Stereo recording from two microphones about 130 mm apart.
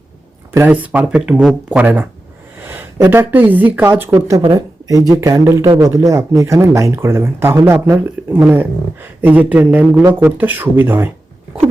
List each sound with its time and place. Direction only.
0.5 s speech: 15° right (ahead or behind)